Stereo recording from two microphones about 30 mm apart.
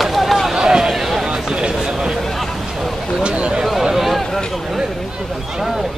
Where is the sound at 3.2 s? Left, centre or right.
Right.